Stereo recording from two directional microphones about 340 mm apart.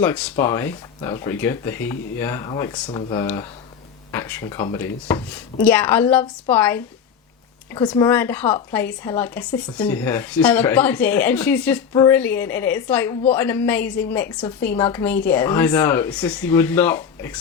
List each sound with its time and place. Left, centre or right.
0.0 s speech: centre